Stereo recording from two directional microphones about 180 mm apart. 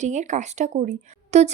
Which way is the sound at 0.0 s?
40° right (ahead or behind).